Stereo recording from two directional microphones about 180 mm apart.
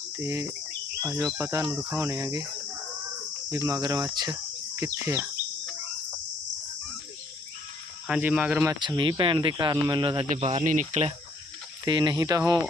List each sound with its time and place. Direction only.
0.2 s speech: 15° right (ahead or behind)
1.6 s cricket: centre (ahead or behind)
1.9 s speech: 15° right (ahead or behind)
3.7 s speech: 20° right (ahead or behind)
8.0 s speech: 5° right (ahead or behind)
8.7 s speech: 25° right (ahead or behind); by 11.1 s 40° right (ahead or behind)
11.9 s speech: 25° right (ahead or behind)